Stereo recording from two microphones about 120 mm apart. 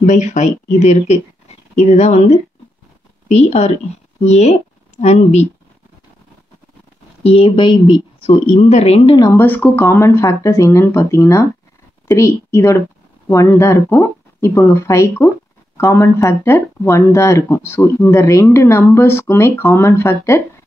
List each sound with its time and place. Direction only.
0.0 s a woman's voice: 90° left; by 5.5 s 70° left (ahead or behind)
7.2 s speech: 50° left (ahead or behind)
8.2 s a woman's voice: 55° left (ahead or behind)
9.2 s speech: 20° left (ahead or behind)